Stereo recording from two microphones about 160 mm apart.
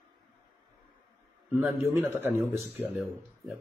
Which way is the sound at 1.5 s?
15° right (ahead or behind).